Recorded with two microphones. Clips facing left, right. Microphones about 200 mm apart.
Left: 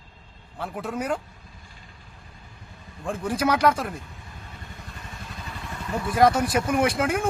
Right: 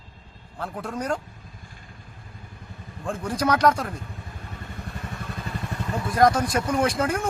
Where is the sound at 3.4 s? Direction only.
5° left (ahead or behind).